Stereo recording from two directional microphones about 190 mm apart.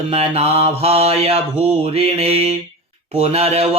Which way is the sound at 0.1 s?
30° right (ahead or behind).